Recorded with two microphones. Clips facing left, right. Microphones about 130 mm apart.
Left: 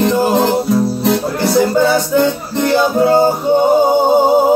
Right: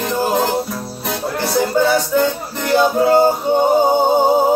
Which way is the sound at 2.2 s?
15° left (ahead or behind).